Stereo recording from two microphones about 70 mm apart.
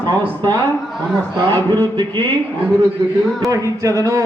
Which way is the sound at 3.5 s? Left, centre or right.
Right.